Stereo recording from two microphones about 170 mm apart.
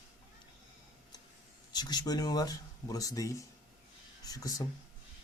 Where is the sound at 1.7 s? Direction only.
25° left (ahead or behind).